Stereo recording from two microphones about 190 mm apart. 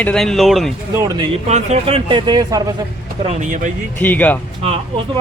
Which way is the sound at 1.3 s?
35° right (ahead or behind).